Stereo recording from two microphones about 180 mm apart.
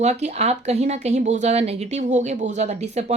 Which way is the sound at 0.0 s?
40° right (ahead or behind).